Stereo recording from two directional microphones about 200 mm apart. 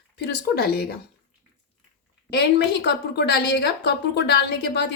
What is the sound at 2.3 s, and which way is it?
A woman's voice, 55° left (ahead or behind).